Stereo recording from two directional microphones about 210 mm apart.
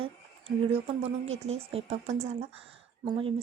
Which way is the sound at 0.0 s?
25° right (ahead or behind).